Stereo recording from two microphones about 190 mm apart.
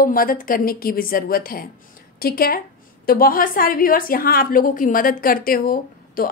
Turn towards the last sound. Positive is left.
turn(degrees=50)  # may be behind; listen again after turning